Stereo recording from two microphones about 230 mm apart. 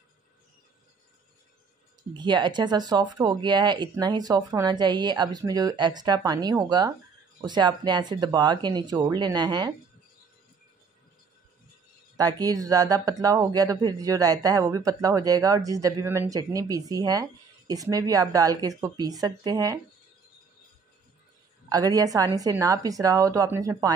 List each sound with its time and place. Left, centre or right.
2.1 s speech: centre
12.2 s speech: centre
21.6 s speech: centre